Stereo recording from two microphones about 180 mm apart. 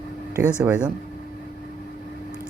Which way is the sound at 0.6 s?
10° right (ahead or behind).